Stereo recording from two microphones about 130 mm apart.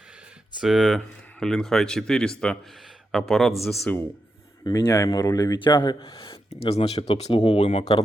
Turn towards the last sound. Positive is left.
turn(degrees=50)  # may be behind; listen again after turning